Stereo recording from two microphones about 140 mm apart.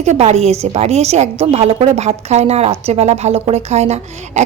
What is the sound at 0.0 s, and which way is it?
A woman's voice, 50° right (ahead or behind).